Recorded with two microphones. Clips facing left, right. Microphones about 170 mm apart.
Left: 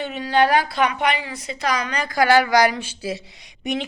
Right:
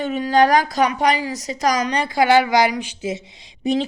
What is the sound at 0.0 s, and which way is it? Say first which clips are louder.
A woman's voice: right 3 dB; 45° right (ahead or behind).